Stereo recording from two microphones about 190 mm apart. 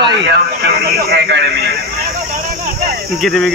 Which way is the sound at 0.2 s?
65° right (ahead or behind).